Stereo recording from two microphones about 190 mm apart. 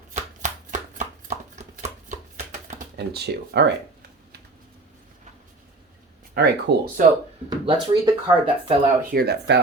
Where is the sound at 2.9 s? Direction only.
60° right (ahead or behind).